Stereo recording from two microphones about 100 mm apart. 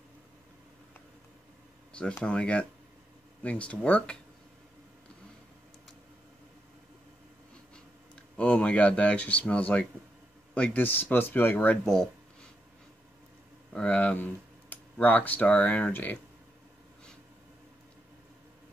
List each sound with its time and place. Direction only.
1.9 s a sound: 10° left (ahead or behind)
2.2 s speech: 10° left (ahead or behind)
8.4 s speech: 10° left (ahead or behind)
11.8 s speech: 5° left (ahead or behind)
13.7 s speech: 15° left (ahead or behind)